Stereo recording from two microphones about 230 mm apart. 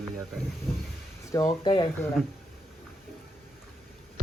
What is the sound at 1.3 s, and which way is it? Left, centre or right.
Speech, centre.